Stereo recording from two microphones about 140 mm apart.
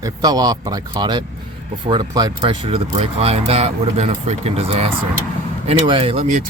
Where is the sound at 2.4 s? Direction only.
45° right (ahead or behind).